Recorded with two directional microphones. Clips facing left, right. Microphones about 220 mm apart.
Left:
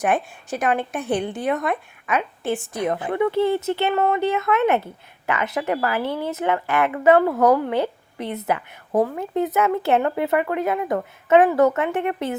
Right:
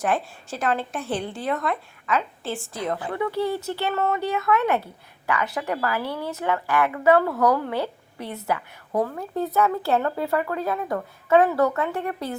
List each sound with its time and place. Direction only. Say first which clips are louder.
0.0 s speech: left 3 dB; 15° left (ahead or behind)